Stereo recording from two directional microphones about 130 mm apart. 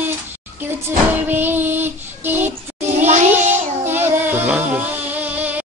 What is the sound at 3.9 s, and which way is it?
Music, 15° right (ahead or behind).